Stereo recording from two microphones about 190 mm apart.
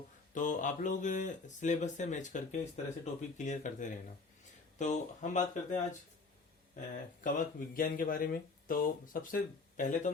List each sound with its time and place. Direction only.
0.3 s speech: 40° left (ahead or behind)
7.3 s speech: 50° left (ahead or behind)